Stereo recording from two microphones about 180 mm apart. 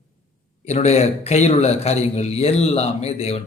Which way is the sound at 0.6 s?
40° left (ahead or behind).